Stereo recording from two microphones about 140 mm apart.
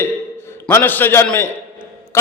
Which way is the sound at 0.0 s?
15° left (ahead or behind).